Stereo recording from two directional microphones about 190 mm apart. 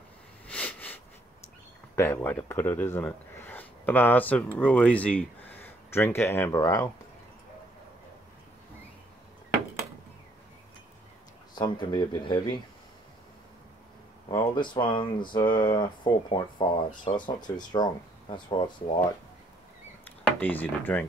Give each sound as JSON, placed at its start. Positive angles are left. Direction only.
{"t": 0.5, "sound": "sniff", "side_deg": 10}
{"t": 2.0, "sound": "speech", "side_deg": 10}
{"t": 11.5, "sound": "speech", "side_deg": 20}
{"t": 14.3, "sound": "speech", "side_deg": 25}
{"t": 20.1, "sound": "a sound", "side_deg": 10}